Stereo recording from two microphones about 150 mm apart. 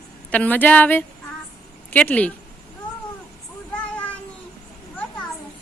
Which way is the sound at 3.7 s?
10° left (ahead or behind).